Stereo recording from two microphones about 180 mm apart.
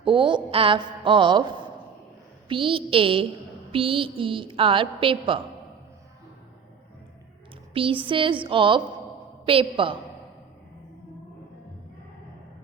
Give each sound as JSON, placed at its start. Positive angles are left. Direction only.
{"t": 0.0, "sound": "a woman's voice", "side_deg": -25}
{"t": 2.5, "sound": "a woman's voice", "side_deg": -30}
{"t": 7.7, "sound": "a woman's voice", "side_deg": -30}